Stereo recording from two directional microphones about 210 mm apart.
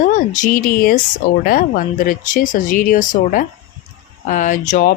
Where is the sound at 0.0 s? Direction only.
40° left (ahead or behind).